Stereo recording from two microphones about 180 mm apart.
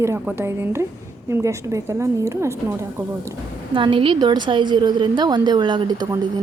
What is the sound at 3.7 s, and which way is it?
A woman's voice, 30° right (ahead or behind).